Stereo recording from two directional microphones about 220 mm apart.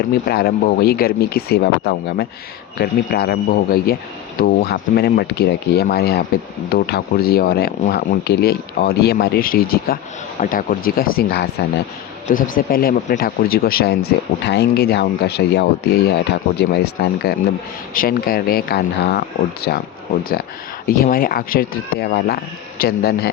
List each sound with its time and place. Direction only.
0.0 s speech: 45° left (ahead or behind)
20.8 s speech: 40° left (ahead or behind)